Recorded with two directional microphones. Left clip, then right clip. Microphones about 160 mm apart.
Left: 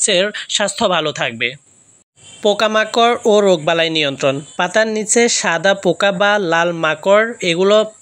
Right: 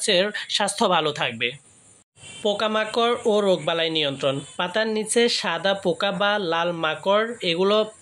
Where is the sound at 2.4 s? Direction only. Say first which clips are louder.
Left 8 dB; 40° left (ahead or behind).